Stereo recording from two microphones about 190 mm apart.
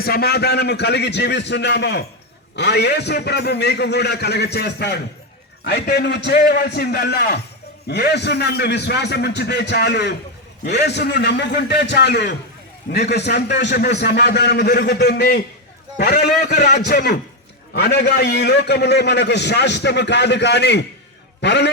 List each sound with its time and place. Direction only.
0.0 s a man's voice: 55° left (ahead or behind)
16.5 s a man's voice: 40° left (ahead or behind)
17.7 s a man's voice: 60° left (ahead or behind)